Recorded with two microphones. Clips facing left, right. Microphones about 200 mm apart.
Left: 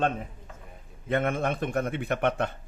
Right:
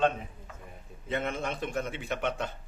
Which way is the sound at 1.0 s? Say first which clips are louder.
Left 6 dB; 55° left (ahead or behind).